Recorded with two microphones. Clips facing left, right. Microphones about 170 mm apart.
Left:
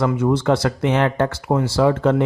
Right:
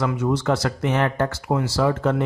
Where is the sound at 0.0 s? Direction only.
55° left (ahead or behind).